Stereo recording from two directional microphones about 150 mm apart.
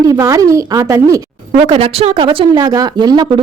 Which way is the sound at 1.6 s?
40° right (ahead or behind).